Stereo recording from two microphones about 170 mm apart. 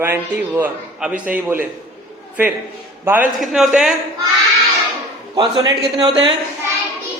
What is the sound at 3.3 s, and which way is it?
Speech, centre (ahead or behind).